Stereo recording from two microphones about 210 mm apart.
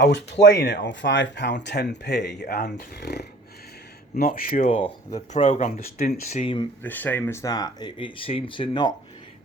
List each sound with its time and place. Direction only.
0.6 s speech: 55° left (ahead or behind); by 6.7 s 25° left (ahead or behind)
6.8 s speech: 10° left (ahead or behind)